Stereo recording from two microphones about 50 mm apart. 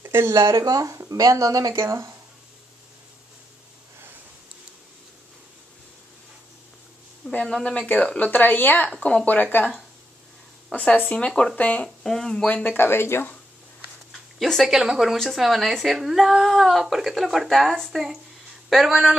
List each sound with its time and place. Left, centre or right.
0.0 s speech: right
7.2 s a sound: right
7.6 s speech: left
8.3 s speech: left
10.7 s speech: left
11.8 s speech: centre
12.4 s speech: left
12.7 s speech: left
14.4 s speech: centre
14.7 s speech: centre
18.7 s speech: centre